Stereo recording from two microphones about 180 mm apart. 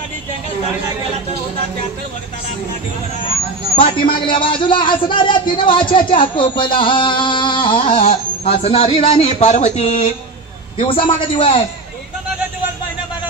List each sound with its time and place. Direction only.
3.7 s a man's voice: 30° left (ahead or behind)